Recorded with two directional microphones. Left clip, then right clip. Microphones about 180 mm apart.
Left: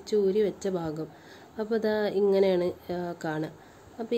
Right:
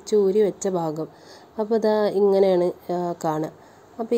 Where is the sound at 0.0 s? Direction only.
20° right (ahead or behind).